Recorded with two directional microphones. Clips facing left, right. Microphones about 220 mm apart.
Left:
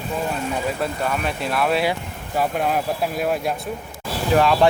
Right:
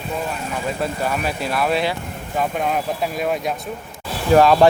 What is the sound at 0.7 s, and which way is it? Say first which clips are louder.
Speech: right 1 dB; centre (ahead or behind).